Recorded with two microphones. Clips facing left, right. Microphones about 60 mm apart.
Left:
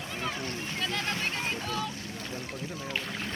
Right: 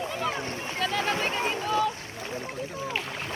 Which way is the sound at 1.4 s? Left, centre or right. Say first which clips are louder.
Right 5 dB; right.